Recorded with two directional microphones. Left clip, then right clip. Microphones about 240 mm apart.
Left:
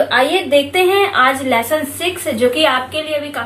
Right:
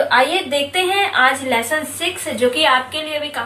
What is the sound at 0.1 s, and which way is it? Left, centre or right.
A woman's voice, centre.